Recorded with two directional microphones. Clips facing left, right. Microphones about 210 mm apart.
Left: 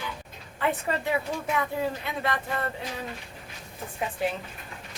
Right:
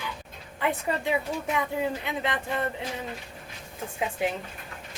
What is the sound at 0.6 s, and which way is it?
Speech, 15° right (ahead or behind).